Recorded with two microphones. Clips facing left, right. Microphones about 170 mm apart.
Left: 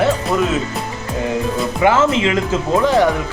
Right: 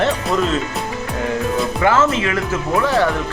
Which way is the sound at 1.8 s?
15° left (ahead or behind).